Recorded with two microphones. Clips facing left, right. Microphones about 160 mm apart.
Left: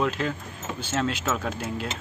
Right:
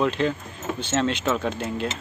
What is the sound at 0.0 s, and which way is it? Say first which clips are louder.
Speech: right 4 dB; 5° left (ahead or behind).